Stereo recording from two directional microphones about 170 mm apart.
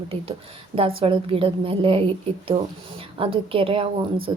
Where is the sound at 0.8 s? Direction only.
30° right (ahead or behind).